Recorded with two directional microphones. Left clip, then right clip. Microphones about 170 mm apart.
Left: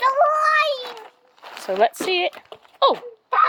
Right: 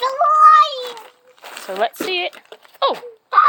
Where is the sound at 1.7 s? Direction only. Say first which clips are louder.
Left 2 dB; 40° left (ahead or behind).